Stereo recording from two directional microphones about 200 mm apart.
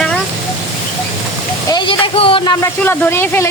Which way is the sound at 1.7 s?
25° left (ahead or behind).